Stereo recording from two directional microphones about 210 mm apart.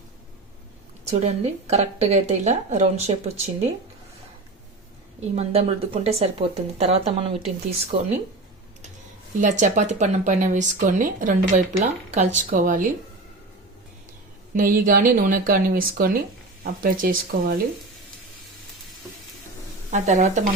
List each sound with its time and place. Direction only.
1.1 s a woman's voice: 30° right (ahead or behind)
5.3 s speech: 30° right (ahead or behind)
9.4 s a woman's voice: 35° right (ahead or behind)
14.5 s speech: 40° right (ahead or behind)
19.9 s a woman's voice: 35° right (ahead or behind)